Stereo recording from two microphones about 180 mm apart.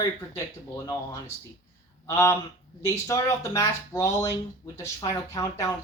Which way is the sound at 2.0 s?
15° left (ahead or behind).